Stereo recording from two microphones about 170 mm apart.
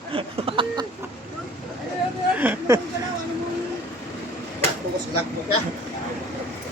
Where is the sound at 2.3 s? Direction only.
10° right (ahead or behind).